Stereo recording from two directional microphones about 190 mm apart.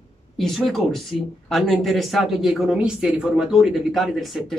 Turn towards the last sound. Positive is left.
turn(degrees=0)  # may be behind; listen again after turning